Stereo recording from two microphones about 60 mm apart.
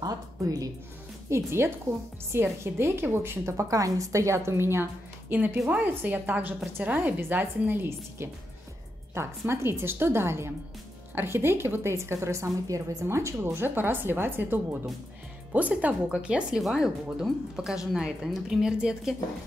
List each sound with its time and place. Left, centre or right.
0.0 s a woman's voice: right
1.3 s speech: right
5.3 s a woman's voice: right
9.2 s speech: right
13.0 s speech: right
13.5 s a woman's voice: right; by 19.1 s centre